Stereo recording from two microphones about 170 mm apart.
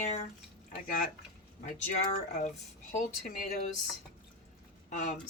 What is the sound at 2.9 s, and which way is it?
Speech, 50° left (ahead or behind).